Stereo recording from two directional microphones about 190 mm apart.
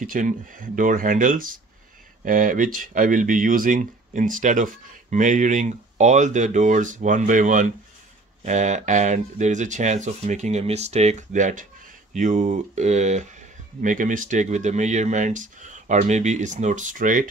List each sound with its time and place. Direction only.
0.0 s speech: 45° right (ahead or behind)